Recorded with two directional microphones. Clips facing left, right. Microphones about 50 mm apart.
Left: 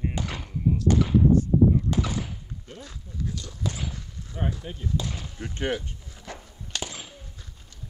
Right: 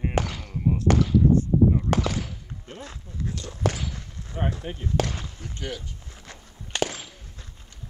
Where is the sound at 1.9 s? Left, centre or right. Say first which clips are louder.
Right 3 dB; right.